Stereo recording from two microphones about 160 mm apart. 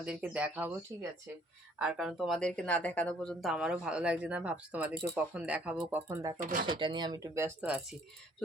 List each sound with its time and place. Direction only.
0.0 s speech: 10° right (ahead or behind)
1.8 s speech: 5° right (ahead or behind)
6.4 s speech: 60° right (ahead or behind)
6.7 s speech: 30° right (ahead or behind); by 7.9 s 10° right (ahead or behind)